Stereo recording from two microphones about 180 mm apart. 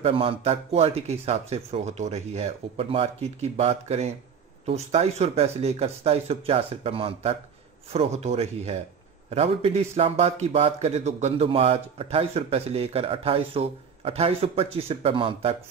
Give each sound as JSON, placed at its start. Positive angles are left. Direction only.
{"t": 0.0, "sound": "speech", "side_deg": -30}